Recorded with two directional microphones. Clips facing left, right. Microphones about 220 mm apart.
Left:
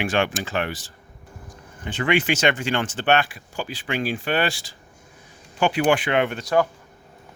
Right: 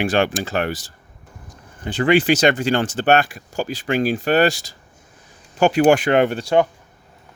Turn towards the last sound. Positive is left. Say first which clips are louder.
# right 4 dB
turn(degrees=-30)  # may be behind; listen again after turning